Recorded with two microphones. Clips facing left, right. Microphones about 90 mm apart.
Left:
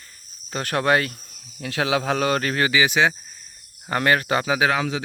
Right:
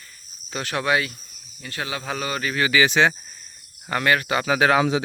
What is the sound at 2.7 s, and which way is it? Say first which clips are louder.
Speech: right 2 dB; 10° left (ahead or behind).